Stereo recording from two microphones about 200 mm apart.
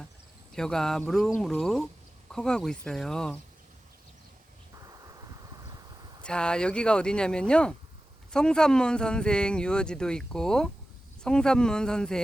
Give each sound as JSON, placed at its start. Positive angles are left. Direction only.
{"t": 0.5, "sound": "speech", "side_deg": 0}
{"t": 4.9, "sound": "a sound", "side_deg": -15}
{"t": 6.2, "sound": "speech", "side_deg": 5}